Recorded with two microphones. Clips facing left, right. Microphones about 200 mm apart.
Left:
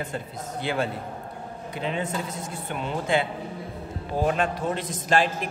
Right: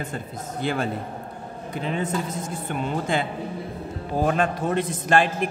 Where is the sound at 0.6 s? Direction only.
45° right (ahead or behind).